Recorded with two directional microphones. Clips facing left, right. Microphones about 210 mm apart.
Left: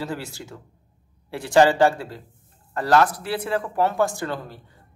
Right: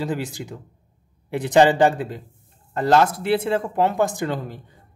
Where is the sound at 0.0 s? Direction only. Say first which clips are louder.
Right 4 dB; 15° right (ahead or behind).